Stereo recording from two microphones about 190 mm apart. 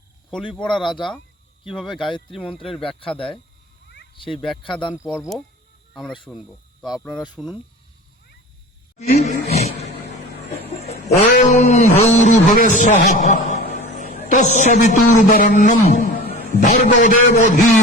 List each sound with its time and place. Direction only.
0.7 s speech: 25° left (ahead or behind)
2.5 s speech: centre (ahead or behind)
4.6 s speech: 25° left (ahead or behind)
4.9 s speech: centre (ahead or behind)
7.1 s speech: 20° left (ahead or behind)
7.3 s speech: 5° right (ahead or behind)
9.0 s grunt: 40° left (ahead or behind)
9.8 s vehicle: 35° left (ahead or behind)
10.8 s a man's voice: 35° left (ahead or behind)